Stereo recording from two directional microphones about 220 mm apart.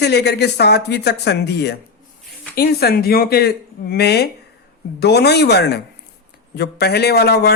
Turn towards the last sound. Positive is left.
turn(degrees=45)  # may be behind; listen again after turning